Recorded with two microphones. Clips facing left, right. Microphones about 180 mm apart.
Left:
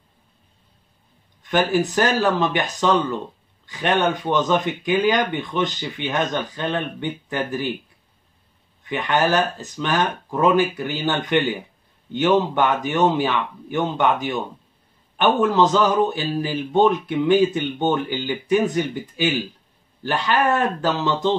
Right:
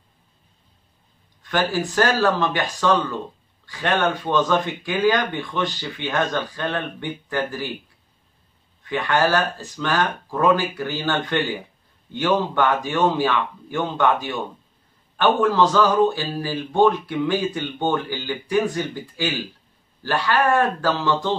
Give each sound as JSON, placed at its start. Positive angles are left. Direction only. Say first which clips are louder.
{"t": 1.4, "sound": "a man's voice", "louder": "left 3 dB", "side_deg": 20}
{"t": 8.8, "sound": "a man's voice", "louder": "even", "side_deg": 20}